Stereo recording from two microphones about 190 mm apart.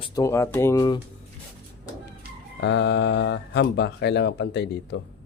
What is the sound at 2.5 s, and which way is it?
Speech, 65° left (ahead or behind).